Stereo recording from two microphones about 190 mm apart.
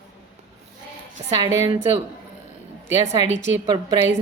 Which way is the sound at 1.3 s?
15° right (ahead or behind).